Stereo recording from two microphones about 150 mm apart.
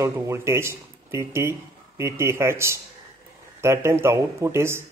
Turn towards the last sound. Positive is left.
turn(degrees=-15)  # may be behind; listen again after turning